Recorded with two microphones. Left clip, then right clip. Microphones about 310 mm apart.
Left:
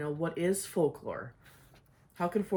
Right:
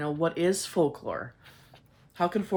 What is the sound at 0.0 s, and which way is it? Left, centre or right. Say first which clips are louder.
Speech: right 6 dB; centre.